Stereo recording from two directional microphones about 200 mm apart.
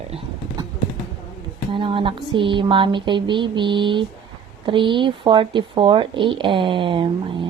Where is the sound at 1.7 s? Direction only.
25° right (ahead or behind).